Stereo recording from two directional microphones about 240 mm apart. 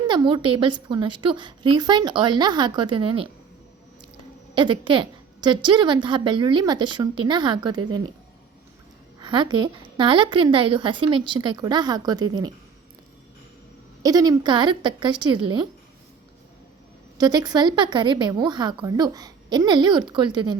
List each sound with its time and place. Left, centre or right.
0.1 s a woman's voice: centre
4.5 s a woman's voice: centre
9.2 s a woman's voice: centre
14.0 s a woman's voice: centre
17.2 s a woman's voice: centre